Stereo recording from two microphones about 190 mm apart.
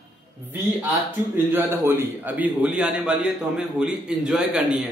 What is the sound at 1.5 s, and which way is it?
A man's voice, 10° right (ahead or behind).